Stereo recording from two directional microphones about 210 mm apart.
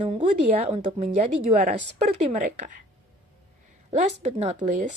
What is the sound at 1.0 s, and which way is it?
Speech, 40° right (ahead or behind).